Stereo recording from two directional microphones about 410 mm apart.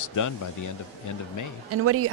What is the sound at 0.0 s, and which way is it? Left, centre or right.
Speech, left.